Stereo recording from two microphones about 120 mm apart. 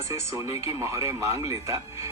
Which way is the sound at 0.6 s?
25° right (ahead or behind).